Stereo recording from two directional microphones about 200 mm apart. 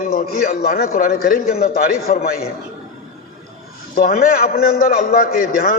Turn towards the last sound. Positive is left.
turn(degrees=45)  # may be behind; listen again after turning